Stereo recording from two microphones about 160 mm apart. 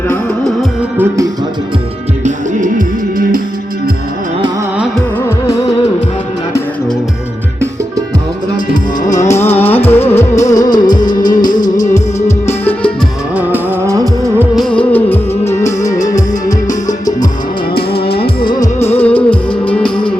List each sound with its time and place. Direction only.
0.9 s music: 20° right (ahead or behind)
2.2 s music: 55° right (ahead or behind)
8.7 s music: 50° left (ahead or behind)
9.2 s music: 15° left (ahead or behind)
10.5 s music: 25° left (ahead or behind)
11.3 s music: 55° left (ahead or behind)
13.3 s music: 10° right (ahead or behind)
14.5 s music: 5° left (ahead or behind)
18.0 s music: 75° left (ahead or behind)
18.9 s music: 10° left (ahead or behind)